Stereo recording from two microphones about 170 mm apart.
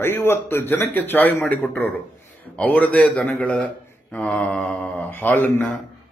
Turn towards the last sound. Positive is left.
turn(degrees=10)  # may be behind; listen again after turning